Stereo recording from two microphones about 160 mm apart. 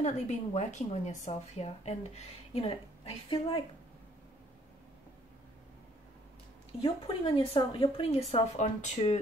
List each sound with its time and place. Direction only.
0.0 s a woman's voice: 45° left (ahead or behind)
3.3 s a woman's voice: 30° left (ahead or behind)
6.8 s speech: 35° left (ahead or behind)